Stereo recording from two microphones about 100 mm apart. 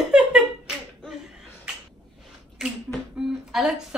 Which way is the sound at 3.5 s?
5° right (ahead or behind).